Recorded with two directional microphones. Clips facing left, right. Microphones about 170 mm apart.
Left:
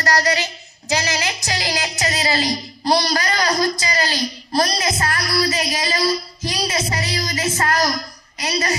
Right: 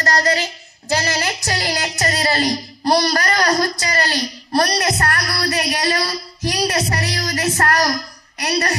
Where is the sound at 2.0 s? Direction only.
50° right (ahead or behind).